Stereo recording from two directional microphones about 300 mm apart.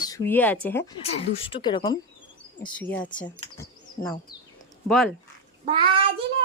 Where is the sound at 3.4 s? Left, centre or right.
Centre.